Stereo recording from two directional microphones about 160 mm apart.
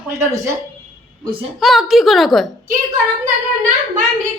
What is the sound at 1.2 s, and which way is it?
Speech, 30° right (ahead or behind).